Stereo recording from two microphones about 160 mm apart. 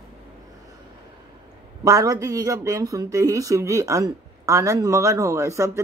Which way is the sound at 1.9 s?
20° right (ahead or behind).